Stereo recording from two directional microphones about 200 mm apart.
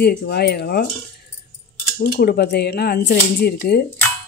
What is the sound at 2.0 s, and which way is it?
Speech, 50° left (ahead or behind).